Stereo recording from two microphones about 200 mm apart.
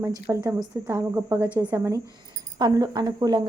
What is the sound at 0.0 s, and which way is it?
A woman's voice, 15° right (ahead or behind).